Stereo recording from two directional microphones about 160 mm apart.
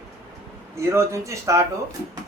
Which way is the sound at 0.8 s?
20° right (ahead or behind).